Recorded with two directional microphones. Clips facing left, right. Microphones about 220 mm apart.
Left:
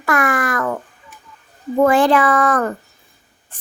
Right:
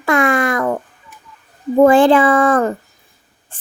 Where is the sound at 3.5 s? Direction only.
30° right (ahead or behind).